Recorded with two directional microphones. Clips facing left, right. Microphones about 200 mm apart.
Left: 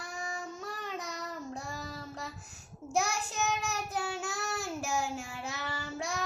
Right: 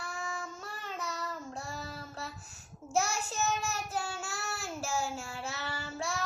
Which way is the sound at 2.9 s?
15° left (ahead or behind).